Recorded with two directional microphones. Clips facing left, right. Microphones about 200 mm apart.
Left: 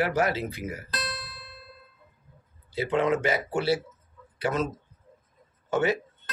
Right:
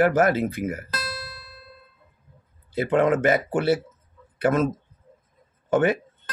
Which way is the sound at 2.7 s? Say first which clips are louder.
Right 4 dB; 50° right (ahead or behind).